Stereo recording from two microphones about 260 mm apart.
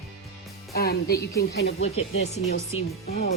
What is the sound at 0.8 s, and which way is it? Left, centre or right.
Speech, left.